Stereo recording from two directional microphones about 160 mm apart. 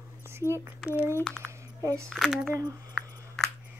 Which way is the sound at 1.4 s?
20° right (ahead or behind).